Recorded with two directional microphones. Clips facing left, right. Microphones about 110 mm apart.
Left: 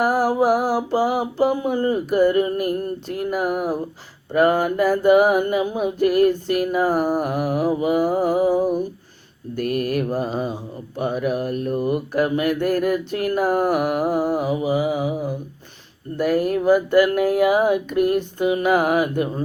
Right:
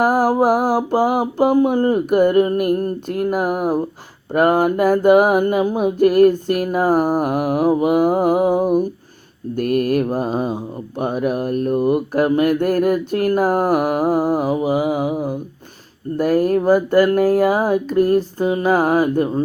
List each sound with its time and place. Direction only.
0.0 s mantra: 45° right (ahead or behind)
16.1 s speech: 40° right (ahead or behind)